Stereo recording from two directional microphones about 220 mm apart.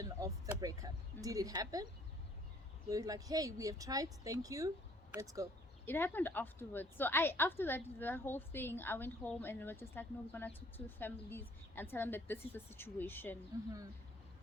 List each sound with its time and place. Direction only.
0.0 s speech: 15° right (ahead or behind)
2.9 s speech: 15° right (ahead or behind)
5.8 s a woman's voice: 10° left (ahead or behind)
13.5 s speech: 15° right (ahead or behind)